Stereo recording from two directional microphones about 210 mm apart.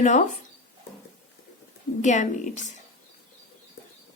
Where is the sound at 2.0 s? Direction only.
35° left (ahead or behind).